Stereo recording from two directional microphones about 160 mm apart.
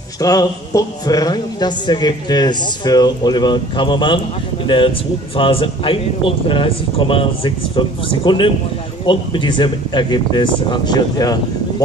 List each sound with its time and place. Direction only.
0.2 s a man's voice: 20° left (ahead or behind)